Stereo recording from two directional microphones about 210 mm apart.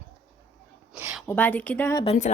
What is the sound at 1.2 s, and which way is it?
Speech, 10° left (ahead or behind).